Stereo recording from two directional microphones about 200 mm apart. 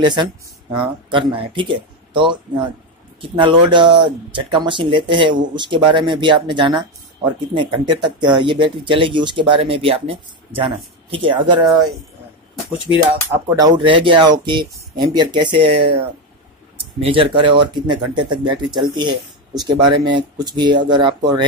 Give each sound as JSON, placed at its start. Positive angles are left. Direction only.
{"t": 0.0, "sound": "speech", "side_deg": -20}
{"t": 13.3, "sound": "speech", "side_deg": -20}
{"t": 17.0, "sound": "speech", "side_deg": -25}